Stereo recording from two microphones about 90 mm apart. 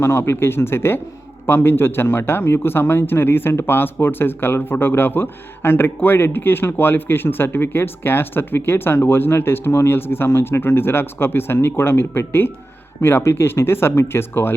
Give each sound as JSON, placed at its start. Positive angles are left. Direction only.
{"t": 0.0, "sound": "a man's voice", "side_deg": 30}